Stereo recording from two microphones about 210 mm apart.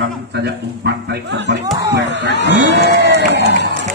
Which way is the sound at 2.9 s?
55° right (ahead or behind).